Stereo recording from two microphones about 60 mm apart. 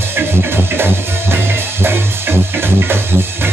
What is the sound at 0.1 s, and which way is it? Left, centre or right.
Music, right.